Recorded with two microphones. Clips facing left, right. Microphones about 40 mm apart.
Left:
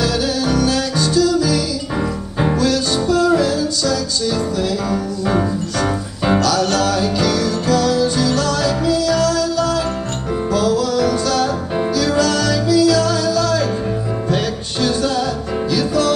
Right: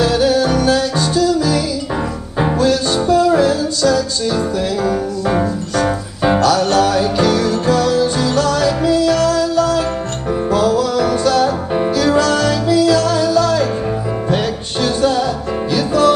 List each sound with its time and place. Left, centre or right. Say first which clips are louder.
0.0 s music: right 5 dB; right
6.4 s music: right 4 dB; right